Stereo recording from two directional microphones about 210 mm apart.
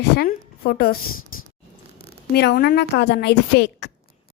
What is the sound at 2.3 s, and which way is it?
A woman's voice, 50° left (ahead or behind).